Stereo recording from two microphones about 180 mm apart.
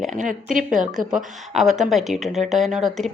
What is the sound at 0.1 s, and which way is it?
Speech, 45° right (ahead or behind).